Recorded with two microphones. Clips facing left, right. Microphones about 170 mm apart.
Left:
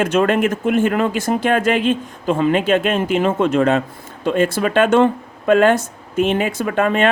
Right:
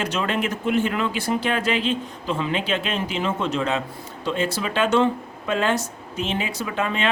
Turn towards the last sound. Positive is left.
turn(degrees=50)  # may be behind; listen again after turning